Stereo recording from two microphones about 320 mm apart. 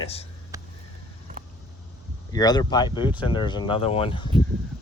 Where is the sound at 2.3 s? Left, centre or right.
Centre.